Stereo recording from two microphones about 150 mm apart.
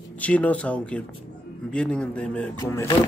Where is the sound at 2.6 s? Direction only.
20° left (ahead or behind).